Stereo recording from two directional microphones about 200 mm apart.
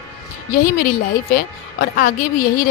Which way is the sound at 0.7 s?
50° left (ahead or behind).